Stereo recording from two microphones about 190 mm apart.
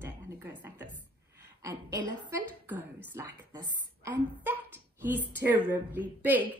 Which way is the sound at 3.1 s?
15° right (ahead or behind).